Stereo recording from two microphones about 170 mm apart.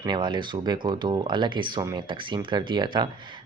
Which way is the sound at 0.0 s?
25° right (ahead or behind).